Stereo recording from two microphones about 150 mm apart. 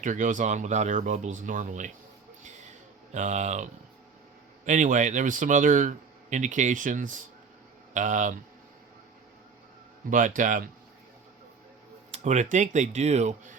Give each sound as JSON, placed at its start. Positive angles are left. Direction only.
{"t": 0.0, "sound": "speech", "side_deg": -60}
{"t": 2.4, "sound": "a sound", "side_deg": -55}
{"t": 4.6, "sound": "speech", "side_deg": -55}
{"t": 10.1, "sound": "speech", "side_deg": -60}
{"t": 12.1, "sound": "speech", "side_deg": -50}